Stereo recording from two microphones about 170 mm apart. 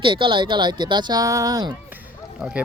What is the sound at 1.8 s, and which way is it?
Run, 10° right (ahead or behind).